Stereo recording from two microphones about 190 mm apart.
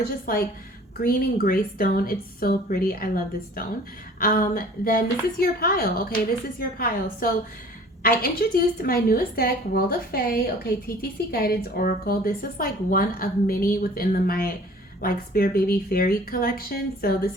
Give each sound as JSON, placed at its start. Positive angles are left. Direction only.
{"t": 0.3, "sound": "a woman's voice", "side_deg": 50}
{"t": 4.2, "sound": "a woman's voice", "side_deg": 50}